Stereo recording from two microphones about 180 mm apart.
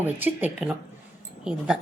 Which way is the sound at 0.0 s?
10° right (ahead or behind).